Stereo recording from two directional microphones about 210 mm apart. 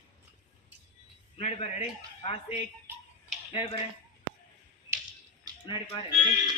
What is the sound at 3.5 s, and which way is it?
Speech, 25° left (ahead or behind).